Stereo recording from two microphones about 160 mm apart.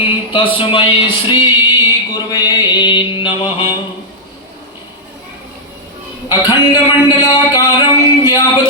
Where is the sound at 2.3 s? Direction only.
25° left (ahead or behind).